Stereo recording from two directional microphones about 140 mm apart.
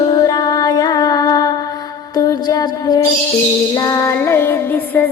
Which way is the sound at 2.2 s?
25° left (ahead or behind).